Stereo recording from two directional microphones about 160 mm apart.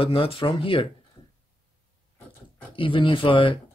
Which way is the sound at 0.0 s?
35° left (ahead or behind).